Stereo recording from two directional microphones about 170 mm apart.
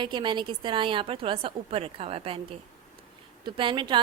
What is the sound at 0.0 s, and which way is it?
A woman's voice, 25° right (ahead or behind).